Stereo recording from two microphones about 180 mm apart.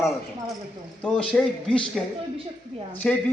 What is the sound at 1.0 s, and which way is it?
A man's voice, 5° left (ahead or behind).